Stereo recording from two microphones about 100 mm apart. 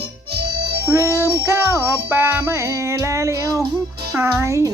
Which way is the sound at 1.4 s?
25° right (ahead or behind).